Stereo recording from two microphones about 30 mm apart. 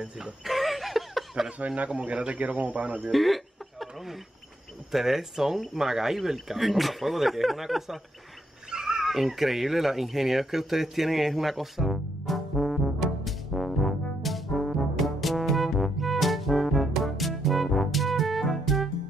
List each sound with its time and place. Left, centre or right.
0.5 s a sound: centre
1.9 s speech: right
2.3 s speech: right
3.1 s a sound: centre
4.9 s speech: centre
8.6 s dog: right
9.0 s cat: centre
14.6 s brass instrument: centre